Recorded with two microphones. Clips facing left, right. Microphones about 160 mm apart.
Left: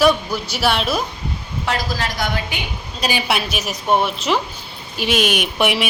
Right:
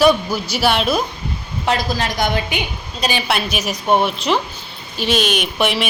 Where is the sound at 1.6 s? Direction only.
20° right (ahead or behind).